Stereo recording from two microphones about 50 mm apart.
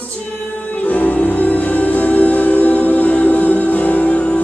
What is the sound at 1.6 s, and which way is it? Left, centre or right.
Music, left.